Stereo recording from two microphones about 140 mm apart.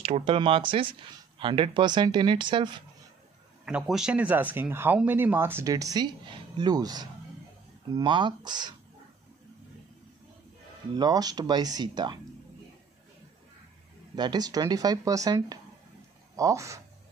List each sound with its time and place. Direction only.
0.2 s speech: 40° right (ahead or behind)
3.6 s speech: 5° right (ahead or behind); by 8.7 s 30° right (ahead or behind)
11.0 s speech: 30° right (ahead or behind)
14.1 s speech: 30° right (ahead or behind)